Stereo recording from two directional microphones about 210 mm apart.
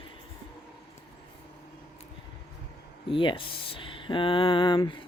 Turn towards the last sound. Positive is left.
turn(degrees=20)  # may be behind; listen again after turning